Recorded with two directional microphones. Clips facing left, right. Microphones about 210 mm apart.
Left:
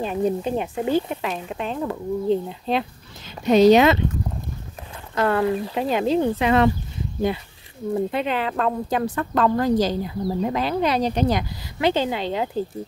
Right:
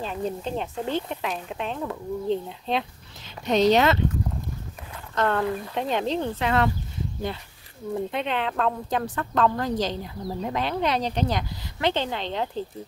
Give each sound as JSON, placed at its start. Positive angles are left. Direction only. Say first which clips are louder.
{"t": 0.0, "sound": "speech", "louder": "left 7 dB", "side_deg": 15}
{"t": 5.1, "sound": "speech", "louder": "left 4 dB", "side_deg": 5}
{"t": 7.9, "sound": "speech", "louder": "left 4 dB", "side_deg": 5}